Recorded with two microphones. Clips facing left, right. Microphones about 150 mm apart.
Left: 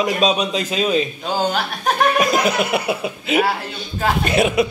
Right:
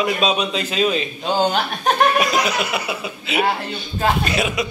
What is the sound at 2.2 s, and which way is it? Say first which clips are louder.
A man's voice: left 2 dB; 50° left (ahead or behind).